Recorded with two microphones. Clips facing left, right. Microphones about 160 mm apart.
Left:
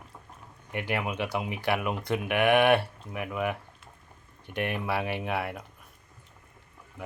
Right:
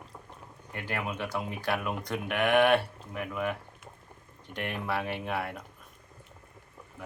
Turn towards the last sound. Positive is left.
turn(degrees=10)  # may be behind; listen again after turning